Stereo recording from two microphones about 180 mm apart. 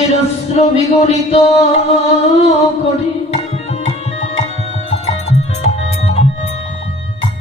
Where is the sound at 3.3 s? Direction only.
35° left (ahead or behind).